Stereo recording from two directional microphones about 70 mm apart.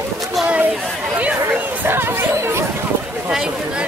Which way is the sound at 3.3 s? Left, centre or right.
Centre.